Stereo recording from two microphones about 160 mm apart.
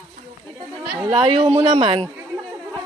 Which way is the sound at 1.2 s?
30° right (ahead or behind).